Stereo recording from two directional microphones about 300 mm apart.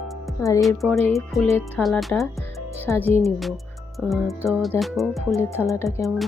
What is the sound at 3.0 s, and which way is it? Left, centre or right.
Speech, centre.